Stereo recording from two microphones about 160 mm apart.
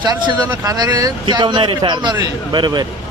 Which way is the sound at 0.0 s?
30° right (ahead or behind).